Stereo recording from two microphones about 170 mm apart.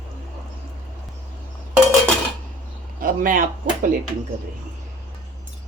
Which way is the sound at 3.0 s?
55° right (ahead or behind).